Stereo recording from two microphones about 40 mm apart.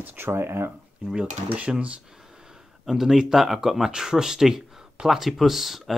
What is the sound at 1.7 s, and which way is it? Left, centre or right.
Speech, right.